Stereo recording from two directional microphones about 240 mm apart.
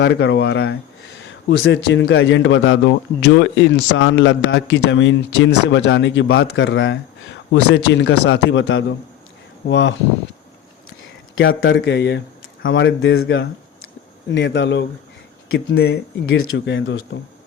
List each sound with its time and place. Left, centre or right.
0.0 s a man's voice: left
11.3 s a man's voice: left